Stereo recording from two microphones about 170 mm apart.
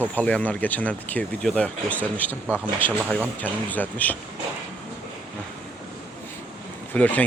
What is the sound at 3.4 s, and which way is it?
Speech, 10° left (ahead or behind).